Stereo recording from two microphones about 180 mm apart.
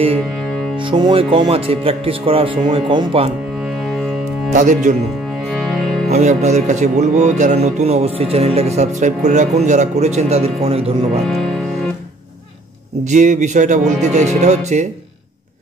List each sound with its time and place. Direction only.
0.7 s speech: 25° right (ahead or behind)
4.5 s speech: 45° right (ahead or behind)
5.5 s music: centre (ahead or behind)
6.0 s music: 40° right (ahead or behind)
13.0 s music: 40° right (ahead or behind)